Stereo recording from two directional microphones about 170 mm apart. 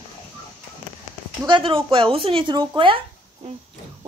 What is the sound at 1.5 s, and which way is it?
Speech, 30° right (ahead or behind).